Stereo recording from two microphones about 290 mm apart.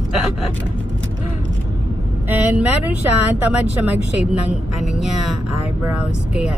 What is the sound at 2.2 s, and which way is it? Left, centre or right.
Speech, centre.